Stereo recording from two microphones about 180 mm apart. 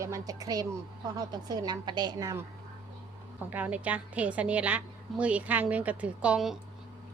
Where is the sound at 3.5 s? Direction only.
10° right (ahead or behind).